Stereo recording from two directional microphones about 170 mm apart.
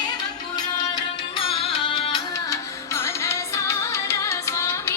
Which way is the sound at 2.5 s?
15° left (ahead or behind).